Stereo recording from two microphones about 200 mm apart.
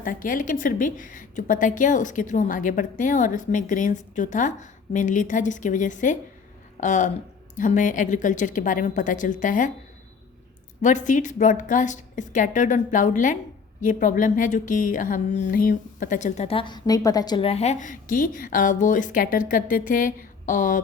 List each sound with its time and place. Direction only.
0.0 s a woman's voice: 45° left (ahead or behind)
10.8 s a woman's voice: 40° left (ahead or behind)